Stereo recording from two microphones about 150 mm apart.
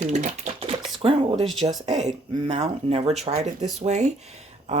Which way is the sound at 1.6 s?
25° right (ahead or behind).